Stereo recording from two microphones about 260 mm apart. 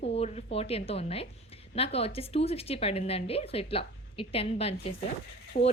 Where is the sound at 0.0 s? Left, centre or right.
Left.